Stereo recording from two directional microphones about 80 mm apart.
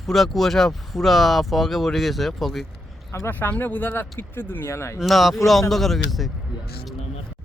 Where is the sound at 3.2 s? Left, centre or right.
Left.